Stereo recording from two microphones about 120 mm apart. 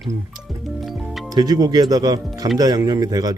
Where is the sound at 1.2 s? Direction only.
35° right (ahead or behind).